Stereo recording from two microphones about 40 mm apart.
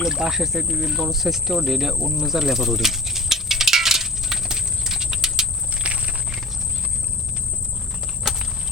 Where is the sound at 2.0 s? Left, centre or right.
Right.